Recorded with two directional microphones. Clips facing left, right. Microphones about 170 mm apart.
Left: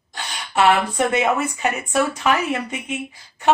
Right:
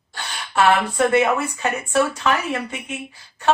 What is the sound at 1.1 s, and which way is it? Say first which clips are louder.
Speech: right 2 dB; 20° left (ahead or behind).